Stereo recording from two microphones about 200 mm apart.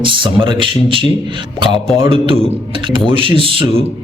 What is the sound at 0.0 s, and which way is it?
Speech, 25° right (ahead or behind).